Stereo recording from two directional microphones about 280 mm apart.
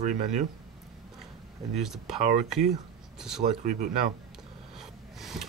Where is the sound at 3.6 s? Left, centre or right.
Right.